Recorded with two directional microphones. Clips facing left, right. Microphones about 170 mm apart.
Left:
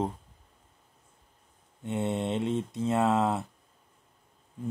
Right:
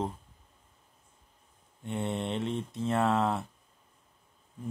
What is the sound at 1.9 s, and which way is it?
Speech, 20° left (ahead or behind).